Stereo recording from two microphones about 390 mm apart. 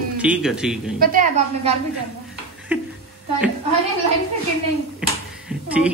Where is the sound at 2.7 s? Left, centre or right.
Centre.